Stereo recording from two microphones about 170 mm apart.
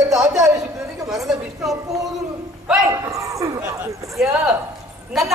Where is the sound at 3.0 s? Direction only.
20° right (ahead or behind).